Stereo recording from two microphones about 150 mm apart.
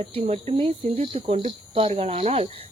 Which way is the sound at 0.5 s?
35° right (ahead or behind).